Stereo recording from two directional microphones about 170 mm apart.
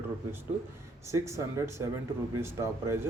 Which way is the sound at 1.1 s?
15° right (ahead or behind).